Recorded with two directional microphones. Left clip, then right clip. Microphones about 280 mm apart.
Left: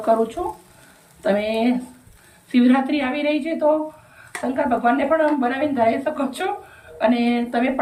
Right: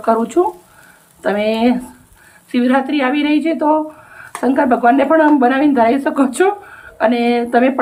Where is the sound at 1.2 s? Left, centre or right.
Centre.